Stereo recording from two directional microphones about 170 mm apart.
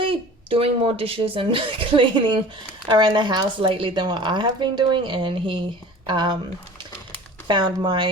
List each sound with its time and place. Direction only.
0.0 s speech: 30° right (ahead or behind)
7.4 s speech: 25° right (ahead or behind)